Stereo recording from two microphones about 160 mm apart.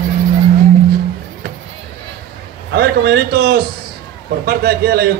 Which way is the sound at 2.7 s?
90° right.